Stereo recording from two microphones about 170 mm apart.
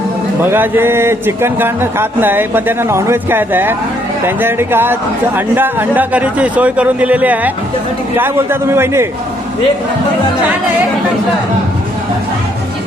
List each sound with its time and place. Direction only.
0.5 s speech: 10° right (ahead or behind)